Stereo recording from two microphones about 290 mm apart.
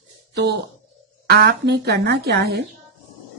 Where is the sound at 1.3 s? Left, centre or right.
Right.